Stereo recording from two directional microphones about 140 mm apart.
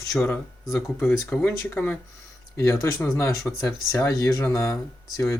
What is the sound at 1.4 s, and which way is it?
Speech, 15° left (ahead or behind).